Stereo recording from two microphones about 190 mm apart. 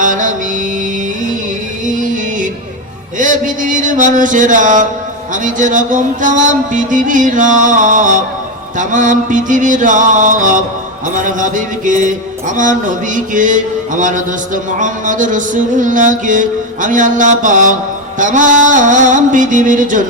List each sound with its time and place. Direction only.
0.0 s mantra: 45° right (ahead or behind)
1.9 s music: 45° right (ahead or behind)
3.2 s a sound: 45° right (ahead or behind)